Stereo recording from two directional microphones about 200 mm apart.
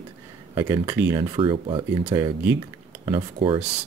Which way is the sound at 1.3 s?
25° right (ahead or behind).